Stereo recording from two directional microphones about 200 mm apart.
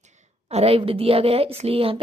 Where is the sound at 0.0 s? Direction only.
35° right (ahead or behind).